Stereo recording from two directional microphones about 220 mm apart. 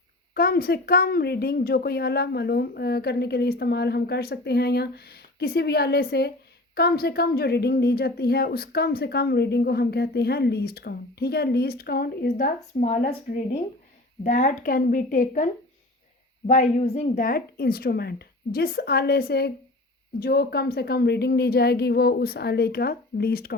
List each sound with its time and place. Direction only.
0.3 s speech: 45° left (ahead or behind)
12.8 s speech: 30° left (ahead or behind)
16.5 s speech: 30° left (ahead or behind)
17.2 s speech: 40° left (ahead or behind)